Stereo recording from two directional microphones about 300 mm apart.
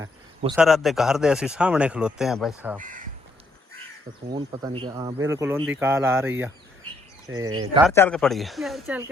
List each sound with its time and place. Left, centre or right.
0.5 s speech: centre
2.7 s speech: right
4.3 s speech: centre
7.9 s speech: centre